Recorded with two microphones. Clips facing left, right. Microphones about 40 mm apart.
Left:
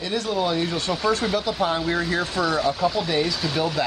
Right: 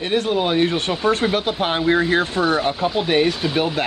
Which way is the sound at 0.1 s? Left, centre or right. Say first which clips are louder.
Right 5 dB; right.